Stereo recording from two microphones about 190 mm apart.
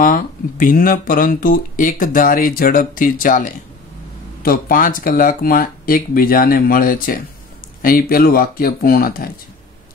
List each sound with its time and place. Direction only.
0.0 s speech: 45° left (ahead or behind)